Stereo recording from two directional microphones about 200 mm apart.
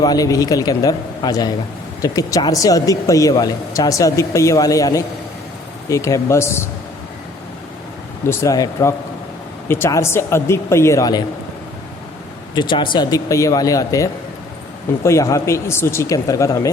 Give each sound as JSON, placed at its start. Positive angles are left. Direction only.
{"t": 0.0, "sound": "speech", "side_deg": 20}
{"t": 8.3, "sound": "speech", "side_deg": 15}
{"t": 12.5, "sound": "speech", "side_deg": 25}